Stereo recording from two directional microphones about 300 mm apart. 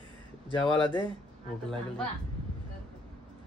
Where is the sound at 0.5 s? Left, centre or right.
Centre.